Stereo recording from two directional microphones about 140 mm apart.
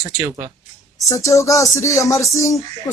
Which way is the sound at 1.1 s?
20° left (ahead or behind).